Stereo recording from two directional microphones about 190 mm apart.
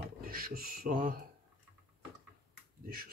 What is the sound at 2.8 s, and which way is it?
Speech, 50° right (ahead or behind).